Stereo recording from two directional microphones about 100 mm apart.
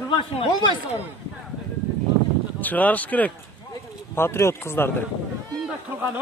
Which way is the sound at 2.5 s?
15° left (ahead or behind).